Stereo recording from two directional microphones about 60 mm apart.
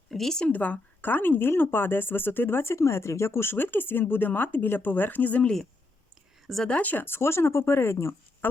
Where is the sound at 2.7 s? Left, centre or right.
Left.